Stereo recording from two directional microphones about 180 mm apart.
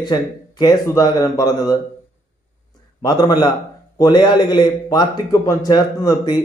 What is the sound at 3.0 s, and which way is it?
Speech, 20° left (ahead or behind).